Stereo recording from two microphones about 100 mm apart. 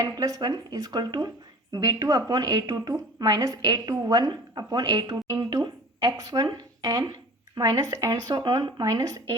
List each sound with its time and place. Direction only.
0.0 s a woman's voice: 35° right (ahead or behind)
8.8 s a woman's voice: 35° right (ahead or behind)